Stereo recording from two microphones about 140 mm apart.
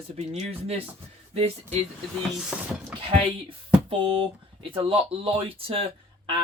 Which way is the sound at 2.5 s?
5° right (ahead or behind).